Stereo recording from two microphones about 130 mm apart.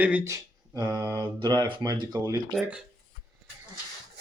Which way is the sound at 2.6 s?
5° right (ahead or behind).